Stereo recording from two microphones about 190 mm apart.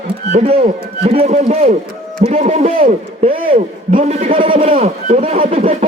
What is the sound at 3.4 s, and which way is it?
A man's voice, 50° right (ahead or behind).